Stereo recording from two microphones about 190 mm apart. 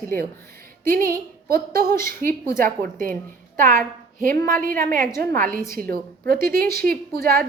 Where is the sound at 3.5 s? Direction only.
45° right (ahead or behind).